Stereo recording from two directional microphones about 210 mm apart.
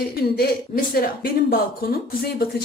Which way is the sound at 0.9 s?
45° left (ahead or behind).